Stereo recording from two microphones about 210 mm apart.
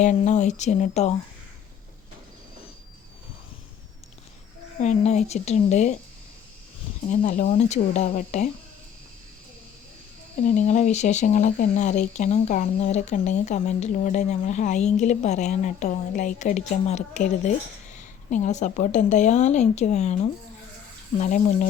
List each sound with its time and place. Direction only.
0.0 s speech: 35° left (ahead or behind)
4.8 s speech: 35° left (ahead or behind)
7.1 s speech: 35° left (ahead or behind)
10.4 s speech: 35° left (ahead or behind)